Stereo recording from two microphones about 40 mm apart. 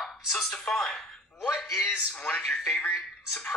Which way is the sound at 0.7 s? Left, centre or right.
Centre.